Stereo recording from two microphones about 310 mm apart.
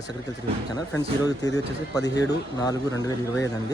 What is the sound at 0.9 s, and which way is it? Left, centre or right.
Speech, centre.